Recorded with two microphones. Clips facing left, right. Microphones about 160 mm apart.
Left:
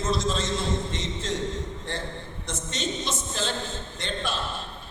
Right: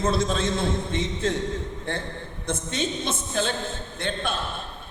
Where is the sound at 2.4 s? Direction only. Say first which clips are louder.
Right 4 dB; 55° right (ahead or behind).